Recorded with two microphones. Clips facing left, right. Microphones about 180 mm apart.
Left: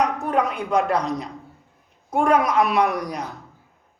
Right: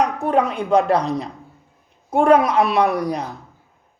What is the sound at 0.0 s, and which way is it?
A woman's voice, 30° right (ahead or behind).